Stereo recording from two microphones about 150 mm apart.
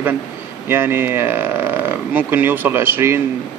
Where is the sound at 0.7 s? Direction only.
15° right (ahead or behind).